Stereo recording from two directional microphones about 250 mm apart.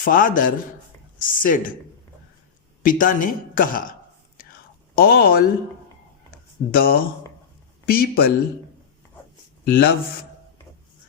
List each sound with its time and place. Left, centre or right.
0.0 s speech: left
2.8 s speech: left
4.9 s speech: left
6.7 s speech: left
9.6 s speech: left